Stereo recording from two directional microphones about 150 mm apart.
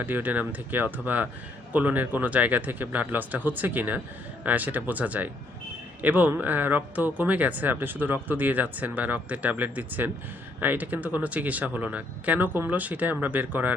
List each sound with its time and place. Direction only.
0.0 s speech: 10° right (ahead or behind)